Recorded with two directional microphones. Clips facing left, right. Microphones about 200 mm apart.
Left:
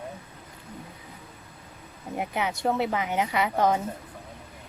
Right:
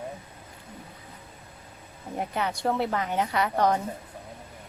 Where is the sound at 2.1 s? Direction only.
10° left (ahead or behind).